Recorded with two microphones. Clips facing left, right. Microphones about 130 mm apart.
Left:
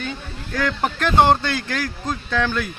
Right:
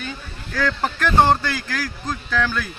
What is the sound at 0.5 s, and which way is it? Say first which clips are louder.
Speech: even; 20° left (ahead or behind).